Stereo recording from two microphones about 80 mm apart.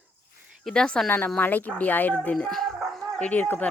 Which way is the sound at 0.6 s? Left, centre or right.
Centre.